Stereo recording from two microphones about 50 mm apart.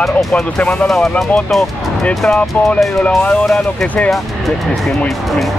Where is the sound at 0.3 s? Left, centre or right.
Left.